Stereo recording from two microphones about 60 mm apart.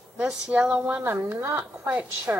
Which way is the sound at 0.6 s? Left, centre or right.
Right.